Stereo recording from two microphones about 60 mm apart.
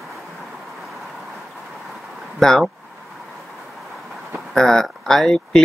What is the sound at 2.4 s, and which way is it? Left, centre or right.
Speech, centre.